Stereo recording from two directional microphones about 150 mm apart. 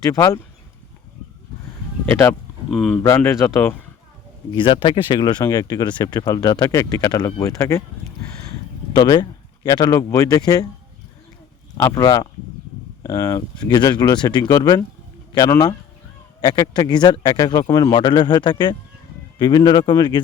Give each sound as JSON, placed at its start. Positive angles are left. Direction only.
{"t": 0.1, "sound": "speech", "side_deg": 20}
{"t": 2.0, "sound": "speech", "side_deg": 15}
{"t": 2.6, "sound": "speech", "side_deg": 0}
{"t": 4.5, "sound": "speech", "side_deg": 35}
{"t": 8.9, "sound": "speech", "side_deg": 30}
{"t": 11.8, "sound": "speech", "side_deg": 15}
{"t": 12.0, "sound": "speech", "side_deg": 30}